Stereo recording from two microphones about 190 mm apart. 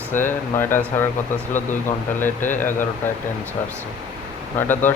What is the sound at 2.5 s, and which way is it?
Speech, 45° left (ahead or behind).